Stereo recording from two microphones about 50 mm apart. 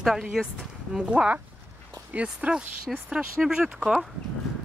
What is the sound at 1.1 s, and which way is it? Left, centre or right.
Speech, right.